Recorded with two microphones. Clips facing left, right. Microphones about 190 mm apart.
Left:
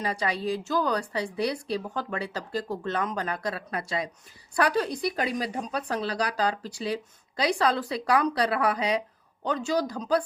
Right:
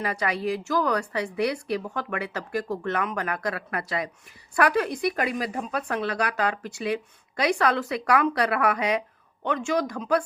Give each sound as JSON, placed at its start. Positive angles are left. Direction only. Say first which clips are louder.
{"t": 0.0, "sound": "speech", "louder": "right 2 dB", "side_deg": 30}